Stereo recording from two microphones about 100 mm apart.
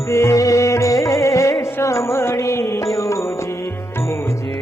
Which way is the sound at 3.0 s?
30° left (ahead or behind).